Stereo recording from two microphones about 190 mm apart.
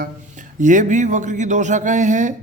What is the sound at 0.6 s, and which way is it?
A man's voice, 40° right (ahead or behind).